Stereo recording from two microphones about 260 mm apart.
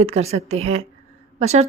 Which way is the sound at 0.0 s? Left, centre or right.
Right.